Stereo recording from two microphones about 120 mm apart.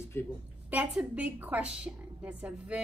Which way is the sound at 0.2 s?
20° left (ahead or behind).